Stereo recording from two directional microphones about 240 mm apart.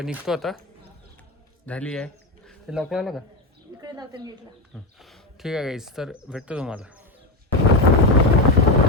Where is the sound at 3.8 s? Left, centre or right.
Centre.